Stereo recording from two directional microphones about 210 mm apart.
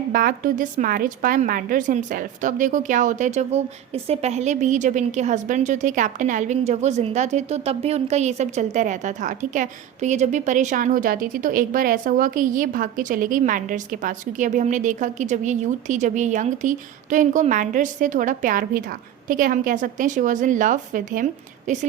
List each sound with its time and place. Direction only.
0.1 s a woman's voice: 45° right (ahead or behind)